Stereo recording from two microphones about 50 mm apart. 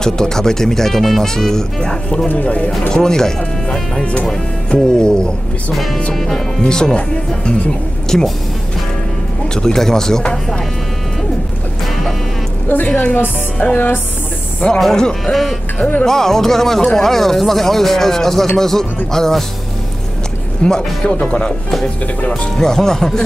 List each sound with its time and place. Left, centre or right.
0.0 s speech: centre
2.2 s speech: left
2.9 s speech: centre
4.0 s speech: left
6.1 s speech: centre
6.6 s speech: centre
8.1 s speech: centre
9.5 s speech: centre
12.8 s speech: left
14.8 s speech: centre
15.8 s speech: left
16.1 s speech: centre
20.6 s speech: centre